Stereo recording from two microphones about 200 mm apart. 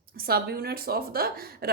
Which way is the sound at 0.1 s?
50° right (ahead or behind).